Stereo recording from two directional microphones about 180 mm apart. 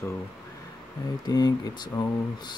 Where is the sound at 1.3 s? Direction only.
20° left (ahead or behind).